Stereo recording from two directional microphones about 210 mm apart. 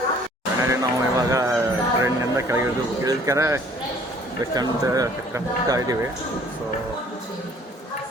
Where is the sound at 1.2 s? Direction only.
15° right (ahead or behind).